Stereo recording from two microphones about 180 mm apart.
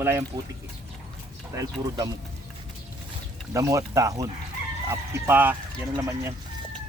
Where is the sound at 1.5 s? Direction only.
20° right (ahead or behind).